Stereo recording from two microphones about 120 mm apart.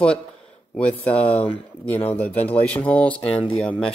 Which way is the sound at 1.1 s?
10° left (ahead or behind).